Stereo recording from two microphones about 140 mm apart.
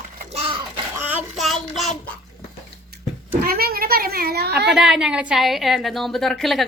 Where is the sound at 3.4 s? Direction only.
90° right.